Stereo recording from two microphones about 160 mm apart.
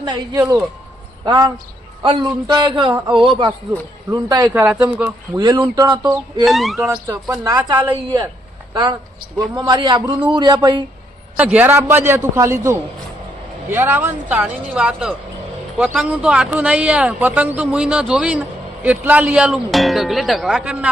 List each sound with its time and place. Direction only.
0.0 s a man's voice: 25° right (ahead or behind)
4.5 s a man's voice: 10° right (ahead or behind)
5.5 s speech: 20° right (ahead or behind)
6.4 s speech: centre (ahead or behind)
7.1 s speech: 20° right (ahead or behind)
11.3 s a man's voice: 10° right (ahead or behind)